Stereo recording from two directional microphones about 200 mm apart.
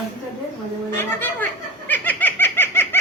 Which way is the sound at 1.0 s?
10° left (ahead or behind).